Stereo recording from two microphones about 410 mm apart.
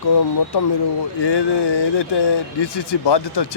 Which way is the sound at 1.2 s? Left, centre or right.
Left.